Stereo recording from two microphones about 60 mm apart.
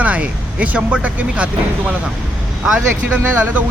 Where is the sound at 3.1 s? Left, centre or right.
Right.